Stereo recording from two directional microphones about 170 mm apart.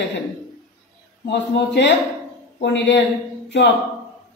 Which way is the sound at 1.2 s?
90° left.